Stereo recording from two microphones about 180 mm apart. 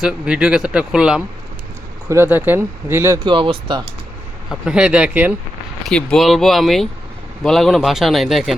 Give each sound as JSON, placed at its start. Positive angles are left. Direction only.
{"t": 0.0, "sound": "speech", "side_deg": -5}
{"t": 3.2, "sound": "speech", "side_deg": -30}
{"t": 4.4, "sound": "speech", "side_deg": -5}
{"t": 5.8, "sound": "speech", "side_deg": 5}